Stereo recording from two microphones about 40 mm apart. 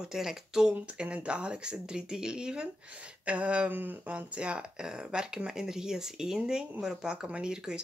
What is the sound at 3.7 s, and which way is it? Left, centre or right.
Speech, right.